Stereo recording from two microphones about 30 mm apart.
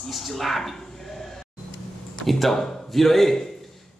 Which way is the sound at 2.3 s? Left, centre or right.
Centre.